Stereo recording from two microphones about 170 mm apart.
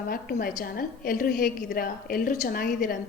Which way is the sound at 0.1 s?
60° left (ahead or behind).